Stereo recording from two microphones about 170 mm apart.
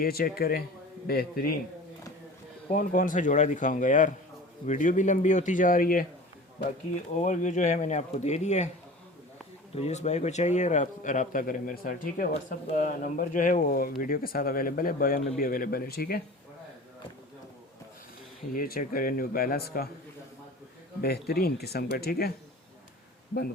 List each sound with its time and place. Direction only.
0.0 s speech: 60° left (ahead or behind)
2.7 s a man's voice: 50° left (ahead or behind)
7.2 s a man's voice: 45° left (ahead or behind)
9.7 s a man's voice: 40° left (ahead or behind); by 16.2 s 65° left (ahead or behind)
18.5 s speech: 55° left (ahead or behind)
21.0 s speech: 65° left (ahead or behind)